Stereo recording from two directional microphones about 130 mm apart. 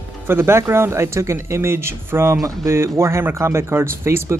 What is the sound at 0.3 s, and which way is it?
Speech, 20° right (ahead or behind).